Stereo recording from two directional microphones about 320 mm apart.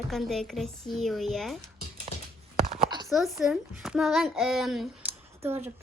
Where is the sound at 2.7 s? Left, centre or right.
Centre.